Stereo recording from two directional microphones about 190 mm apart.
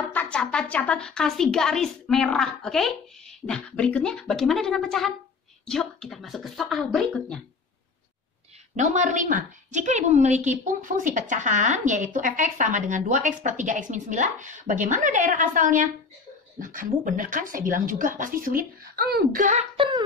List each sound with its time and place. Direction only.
0.1 s speech: 5° left (ahead or behind)
8.7 s a woman's voice: 40° right (ahead or behind)
19.4 s a woman's voice: 35° right (ahead or behind)